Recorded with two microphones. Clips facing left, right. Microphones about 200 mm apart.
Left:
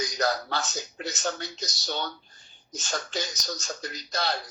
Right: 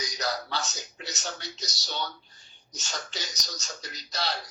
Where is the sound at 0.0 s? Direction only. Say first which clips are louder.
Left 5 dB; 50° left (ahead or behind).